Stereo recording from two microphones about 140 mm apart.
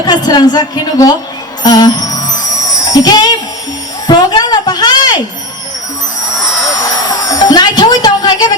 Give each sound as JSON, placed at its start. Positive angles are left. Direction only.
{"t": 0.0, "sound": "a woman's voice", "side_deg": 30}
{"t": 1.6, "sound": "music", "side_deg": 25}
{"t": 4.0, "sound": "a sound", "side_deg": 30}
{"t": 6.7, "sound": "music", "side_deg": 25}